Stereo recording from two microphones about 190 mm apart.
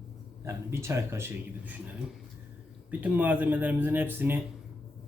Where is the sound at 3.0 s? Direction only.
10° right (ahead or behind).